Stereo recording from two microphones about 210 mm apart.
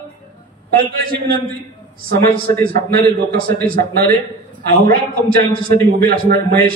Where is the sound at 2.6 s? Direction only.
45° right (ahead or behind).